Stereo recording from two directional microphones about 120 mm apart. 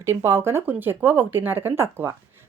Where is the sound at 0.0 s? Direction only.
20° right (ahead or behind).